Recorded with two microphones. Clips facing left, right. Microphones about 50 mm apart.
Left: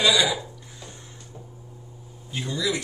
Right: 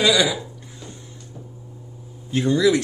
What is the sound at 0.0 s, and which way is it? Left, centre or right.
Speech, right.